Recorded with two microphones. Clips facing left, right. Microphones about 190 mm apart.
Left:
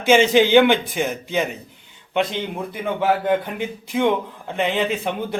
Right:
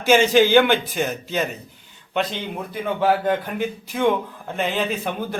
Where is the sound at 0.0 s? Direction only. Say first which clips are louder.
Left 1 dB; 20° left (ahead or behind).